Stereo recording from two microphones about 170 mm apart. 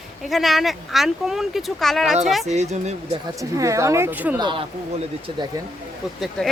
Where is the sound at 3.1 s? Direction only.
20° right (ahead or behind).